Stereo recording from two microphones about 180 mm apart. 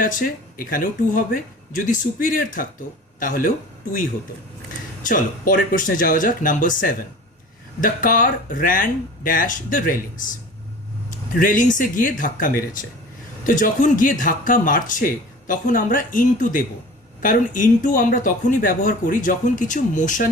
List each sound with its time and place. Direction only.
0.0 s speech: 50° left (ahead or behind)
5.0 s speech: 50° left (ahead or behind)
11.3 s speech: 50° left (ahead or behind)